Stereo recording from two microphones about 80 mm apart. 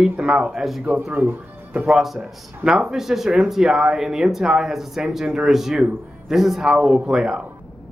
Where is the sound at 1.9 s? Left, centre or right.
Centre.